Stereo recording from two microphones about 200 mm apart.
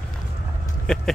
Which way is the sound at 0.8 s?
5° left (ahead or behind).